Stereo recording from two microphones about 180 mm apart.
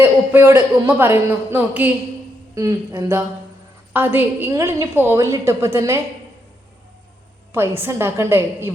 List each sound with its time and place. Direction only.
0.0 s a woman's voice: 10° right (ahead or behind)
7.5 s a woman's voice: 15° right (ahead or behind)